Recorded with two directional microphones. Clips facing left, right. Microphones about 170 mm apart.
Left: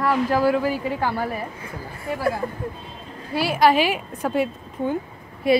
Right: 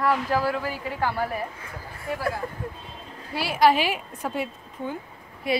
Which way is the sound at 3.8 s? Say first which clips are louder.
Left 4 dB; 80° left.